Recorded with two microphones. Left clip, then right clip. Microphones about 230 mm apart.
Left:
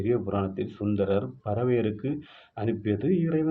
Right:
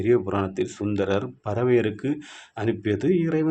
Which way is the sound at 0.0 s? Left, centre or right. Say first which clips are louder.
Right 5 dB; right.